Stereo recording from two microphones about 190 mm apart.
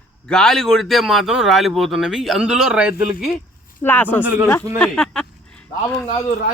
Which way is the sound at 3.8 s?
10° left (ahead or behind).